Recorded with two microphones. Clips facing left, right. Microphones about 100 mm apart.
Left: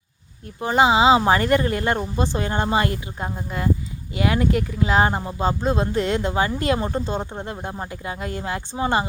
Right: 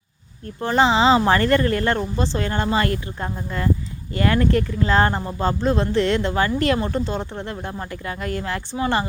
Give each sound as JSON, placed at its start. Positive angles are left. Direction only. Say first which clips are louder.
{"t": 0.4, "sound": "speech", "louder": "even", "side_deg": 15}